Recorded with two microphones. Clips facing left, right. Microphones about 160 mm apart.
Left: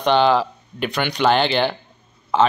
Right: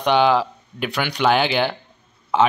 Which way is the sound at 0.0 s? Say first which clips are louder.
Left 1 dB; 10° right (ahead or behind).